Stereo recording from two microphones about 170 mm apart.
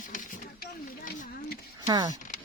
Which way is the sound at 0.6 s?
65° left (ahead or behind).